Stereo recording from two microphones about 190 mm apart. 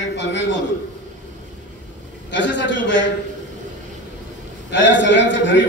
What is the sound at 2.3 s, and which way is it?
Speech, 70° left (ahead or behind).